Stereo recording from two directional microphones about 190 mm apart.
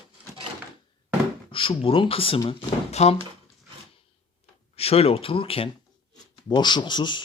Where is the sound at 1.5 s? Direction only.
30° left (ahead or behind).